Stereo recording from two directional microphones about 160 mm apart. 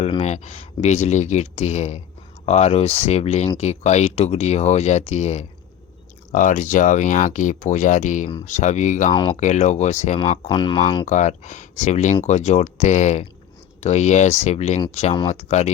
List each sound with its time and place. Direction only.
0.0 s speech: 40° left (ahead or behind)
10.2 s speech: 35° left (ahead or behind)
11.0 s speech: 45° left (ahead or behind)